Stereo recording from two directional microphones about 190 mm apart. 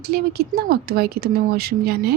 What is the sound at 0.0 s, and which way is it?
A woman's voice, 55° right (ahead or behind).